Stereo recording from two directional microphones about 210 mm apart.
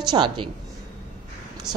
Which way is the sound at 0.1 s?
20° right (ahead or behind).